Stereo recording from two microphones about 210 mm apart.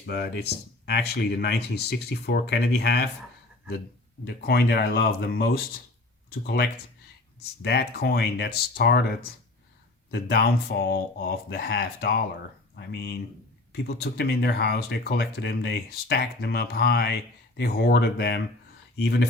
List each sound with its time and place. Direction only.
0.0 s speech: 50° left (ahead or behind)
4.4 s speech: 45° left (ahead or behind)